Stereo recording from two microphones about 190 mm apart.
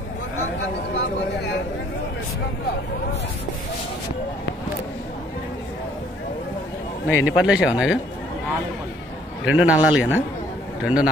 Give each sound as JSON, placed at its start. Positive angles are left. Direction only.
{"t": 0.9, "sound": "a sound", "side_deg": 60}
{"t": 7.1, "sound": "speech", "side_deg": 80}
{"t": 7.4, "sound": "speech", "side_deg": -5}
{"t": 9.6, "sound": "a man's voice", "side_deg": -5}